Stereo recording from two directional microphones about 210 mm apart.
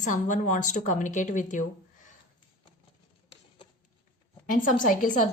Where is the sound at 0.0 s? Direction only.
35° left (ahead or behind).